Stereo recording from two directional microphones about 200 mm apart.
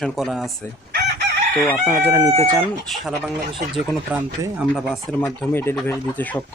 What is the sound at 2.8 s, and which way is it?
Speech, centre (ahead or behind).